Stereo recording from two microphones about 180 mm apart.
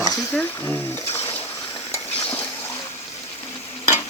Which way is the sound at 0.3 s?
15° left (ahead or behind).